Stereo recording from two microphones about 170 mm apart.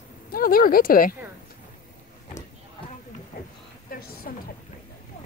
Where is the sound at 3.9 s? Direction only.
60° left (ahead or behind).